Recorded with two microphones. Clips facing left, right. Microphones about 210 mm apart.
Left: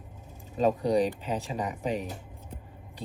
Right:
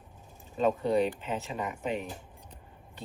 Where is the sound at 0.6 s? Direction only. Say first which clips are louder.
Left 2 dB; 40° left (ahead or behind).